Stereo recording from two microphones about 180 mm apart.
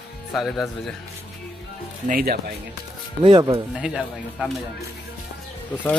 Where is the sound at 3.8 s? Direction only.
Centre (ahead or behind).